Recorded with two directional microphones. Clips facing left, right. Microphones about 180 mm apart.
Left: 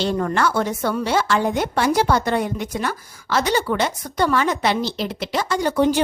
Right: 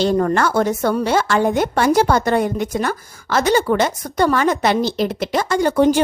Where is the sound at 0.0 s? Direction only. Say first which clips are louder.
Right 4 dB; 40° right (ahead or behind).